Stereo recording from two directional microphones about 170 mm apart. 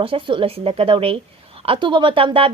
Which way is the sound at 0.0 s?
30° right (ahead or behind).